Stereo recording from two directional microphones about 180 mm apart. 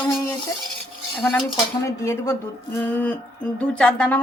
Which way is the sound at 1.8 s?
15° left (ahead or behind).